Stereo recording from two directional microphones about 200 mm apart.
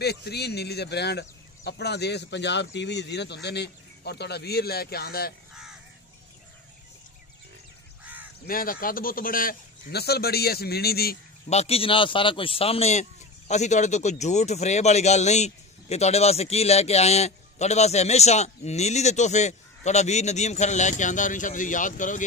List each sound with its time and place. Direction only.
0.0 s speech: 55° left (ahead or behind)
8.0 s crow: 10° right (ahead or behind)
8.5 s a man's voice: 45° left (ahead or behind)
11.4 s speech: 30° left (ahead or behind)